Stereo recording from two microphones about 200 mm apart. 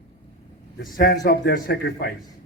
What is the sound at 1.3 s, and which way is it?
Speech, 50° left (ahead or behind).